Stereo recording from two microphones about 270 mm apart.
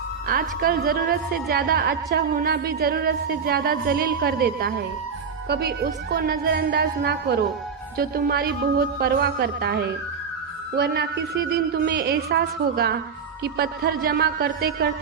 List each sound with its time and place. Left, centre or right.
0.3 s a woman's voice: right